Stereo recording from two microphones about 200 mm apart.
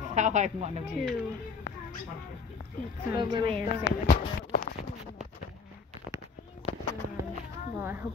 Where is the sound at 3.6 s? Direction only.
50° left (ahead or behind).